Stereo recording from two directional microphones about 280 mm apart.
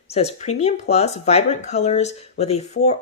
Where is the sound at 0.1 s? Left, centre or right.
Left.